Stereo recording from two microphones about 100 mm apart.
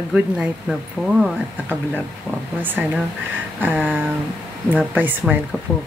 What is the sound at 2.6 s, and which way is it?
Speech, 20° right (ahead or behind).